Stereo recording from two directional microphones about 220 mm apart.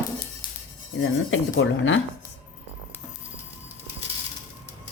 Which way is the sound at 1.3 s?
60° left (ahead or behind).